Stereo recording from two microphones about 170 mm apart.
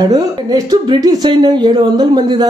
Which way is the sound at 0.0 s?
20° right (ahead or behind).